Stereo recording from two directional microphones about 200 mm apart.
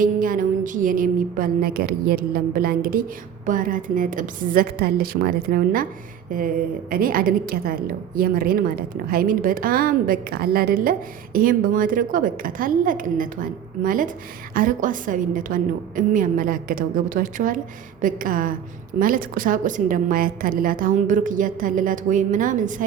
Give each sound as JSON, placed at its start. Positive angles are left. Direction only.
{"t": 0.0, "sound": "a woman's voice", "side_deg": -45}
{"t": 6.9, "sound": "a woman's voice", "side_deg": -45}